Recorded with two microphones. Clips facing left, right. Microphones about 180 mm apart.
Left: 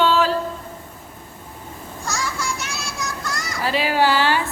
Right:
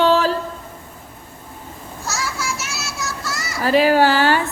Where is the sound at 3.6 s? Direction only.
45° right (ahead or behind).